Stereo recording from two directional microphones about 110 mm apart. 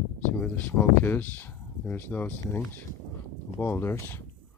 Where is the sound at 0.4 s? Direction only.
15° left (ahead or behind).